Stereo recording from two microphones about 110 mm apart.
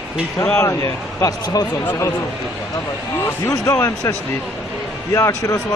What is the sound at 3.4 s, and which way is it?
A man's voice, 25° left (ahead or behind).